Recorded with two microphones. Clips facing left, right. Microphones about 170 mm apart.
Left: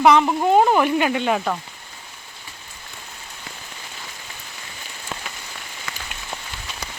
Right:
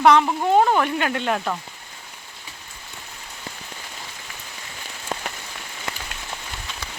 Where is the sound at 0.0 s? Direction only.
5° left (ahead or behind).